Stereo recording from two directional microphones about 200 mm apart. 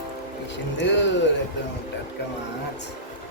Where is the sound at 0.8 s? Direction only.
65° left (ahead or behind).